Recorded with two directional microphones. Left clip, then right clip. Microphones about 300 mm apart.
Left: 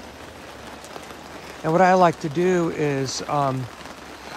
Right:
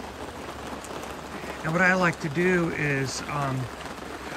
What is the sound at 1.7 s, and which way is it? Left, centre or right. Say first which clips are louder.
Speech: left 6 dB; centre.